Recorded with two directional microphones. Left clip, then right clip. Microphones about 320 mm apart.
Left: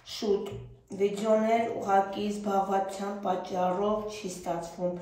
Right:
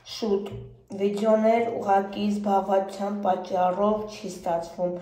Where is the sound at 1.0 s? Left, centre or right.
Centre.